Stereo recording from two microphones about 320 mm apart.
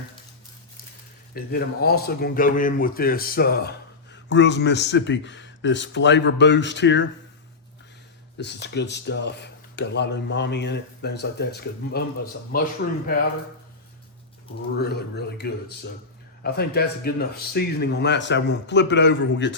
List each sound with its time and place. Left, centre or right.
1.3 s a man's voice: left
8.6 s a man's voice: left
14.8 s a man's voice: left